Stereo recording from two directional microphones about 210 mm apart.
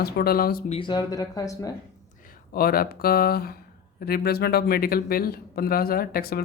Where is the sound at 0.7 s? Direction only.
20° left (ahead or behind).